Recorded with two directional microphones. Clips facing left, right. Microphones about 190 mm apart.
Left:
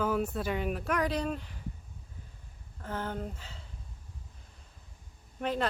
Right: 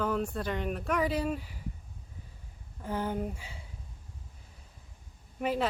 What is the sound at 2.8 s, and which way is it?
Speech, 10° right (ahead or behind).